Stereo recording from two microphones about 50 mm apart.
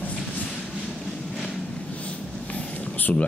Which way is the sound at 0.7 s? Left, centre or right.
Centre.